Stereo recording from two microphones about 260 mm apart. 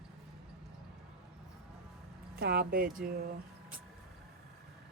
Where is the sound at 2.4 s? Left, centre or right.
Right.